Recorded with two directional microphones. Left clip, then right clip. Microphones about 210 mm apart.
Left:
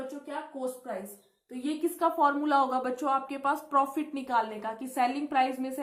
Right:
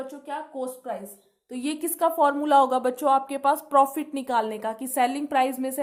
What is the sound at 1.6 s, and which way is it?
A woman's voice, 45° right (ahead or behind).